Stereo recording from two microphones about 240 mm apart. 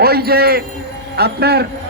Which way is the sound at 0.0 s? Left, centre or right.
Right.